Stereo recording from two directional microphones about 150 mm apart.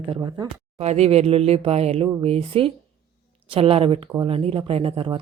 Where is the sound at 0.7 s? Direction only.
45° right (ahead or behind).